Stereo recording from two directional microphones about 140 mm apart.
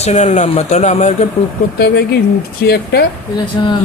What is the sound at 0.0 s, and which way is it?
Speech, 50° left (ahead or behind).